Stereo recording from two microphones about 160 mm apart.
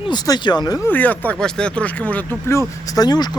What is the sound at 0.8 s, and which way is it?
Speech, 10° left (ahead or behind).